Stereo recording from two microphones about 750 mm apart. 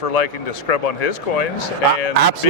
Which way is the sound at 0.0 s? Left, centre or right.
Left.